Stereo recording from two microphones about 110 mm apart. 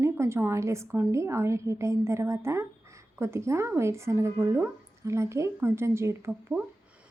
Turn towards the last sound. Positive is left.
turn(degrees=5)  # may be behind; listen again after turning